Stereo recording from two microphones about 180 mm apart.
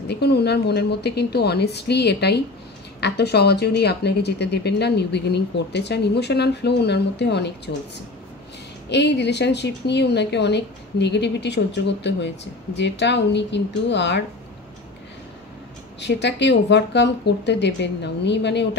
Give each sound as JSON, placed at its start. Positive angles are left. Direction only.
{"t": 0.1, "sound": "speech", "side_deg": 65}
{"t": 8.9, "sound": "speech", "side_deg": 70}
{"t": 16.0, "sound": "speech", "side_deg": 75}